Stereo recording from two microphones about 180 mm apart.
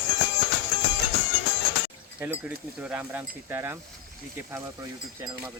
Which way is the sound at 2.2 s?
10° right (ahead or behind).